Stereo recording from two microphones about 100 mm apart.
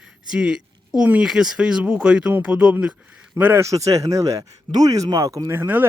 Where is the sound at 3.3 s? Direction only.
25° right (ahead or behind).